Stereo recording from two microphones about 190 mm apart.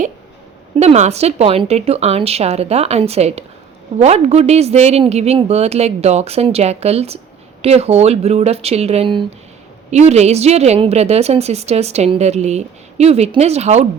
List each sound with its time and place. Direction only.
0.8 s a woman's voice: 35° right (ahead or behind)